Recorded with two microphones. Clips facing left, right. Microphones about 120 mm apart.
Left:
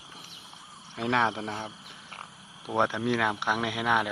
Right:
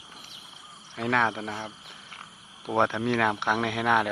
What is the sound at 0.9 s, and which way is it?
Speech, 20° left (ahead or behind).